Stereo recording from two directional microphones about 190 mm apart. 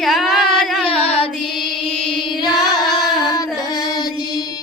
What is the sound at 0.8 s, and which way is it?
Child singing, 30° left (ahead or behind).